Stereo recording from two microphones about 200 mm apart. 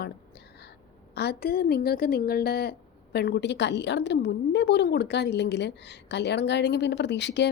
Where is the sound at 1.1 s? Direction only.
55° left (ahead or behind).